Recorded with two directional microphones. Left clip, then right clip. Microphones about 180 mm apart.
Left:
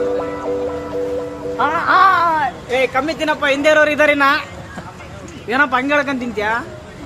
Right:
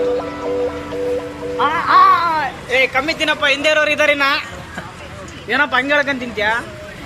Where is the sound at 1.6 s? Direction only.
70° left (ahead or behind); by 4.5 s 50° left (ahead or behind).